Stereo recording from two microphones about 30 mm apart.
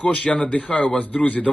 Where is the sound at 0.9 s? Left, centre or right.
Left.